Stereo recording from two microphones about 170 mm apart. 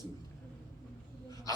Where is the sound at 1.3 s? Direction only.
20° left (ahead or behind).